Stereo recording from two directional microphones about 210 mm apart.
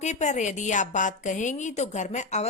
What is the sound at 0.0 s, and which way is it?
A woman's voice, 35° left (ahead or behind).